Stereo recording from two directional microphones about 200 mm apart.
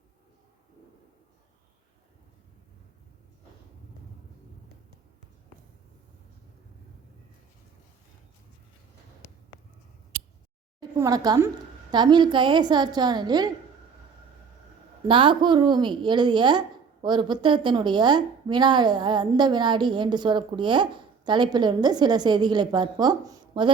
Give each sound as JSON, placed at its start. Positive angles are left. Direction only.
{"t": 10.1, "sound": "a sound", "side_deg": -60}
{"t": 10.8, "sound": "a woman's voice", "side_deg": -20}
{"t": 15.0, "sound": "a woman's voice", "side_deg": -25}